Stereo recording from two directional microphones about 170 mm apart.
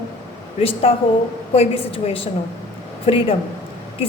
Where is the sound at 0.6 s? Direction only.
35° left (ahead or behind).